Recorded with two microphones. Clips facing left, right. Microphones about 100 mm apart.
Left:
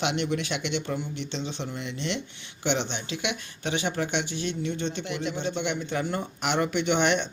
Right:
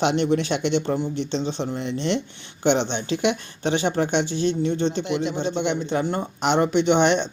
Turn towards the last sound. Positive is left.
turn(degrees=-25)  # may be behind; listen again after turning